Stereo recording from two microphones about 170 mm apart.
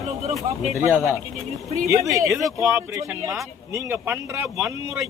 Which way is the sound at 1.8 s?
20° right (ahead or behind).